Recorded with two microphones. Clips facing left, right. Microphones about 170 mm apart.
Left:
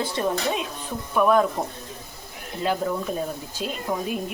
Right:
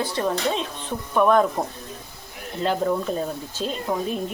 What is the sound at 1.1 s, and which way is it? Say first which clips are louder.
Speech: right 1 dB; 5° left (ahead or behind).